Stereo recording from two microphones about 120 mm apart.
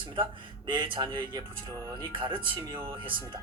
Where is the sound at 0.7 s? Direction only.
40° right (ahead or behind).